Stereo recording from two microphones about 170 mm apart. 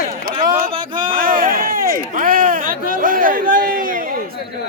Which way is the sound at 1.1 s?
55° right (ahead or behind).